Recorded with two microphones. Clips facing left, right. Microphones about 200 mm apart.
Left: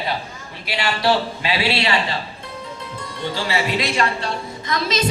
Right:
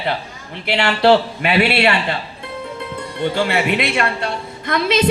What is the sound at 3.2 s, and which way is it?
A man's voice, 60° right (ahead or behind).